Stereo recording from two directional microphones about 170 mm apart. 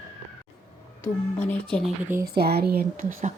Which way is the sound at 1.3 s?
5° left (ahead or behind).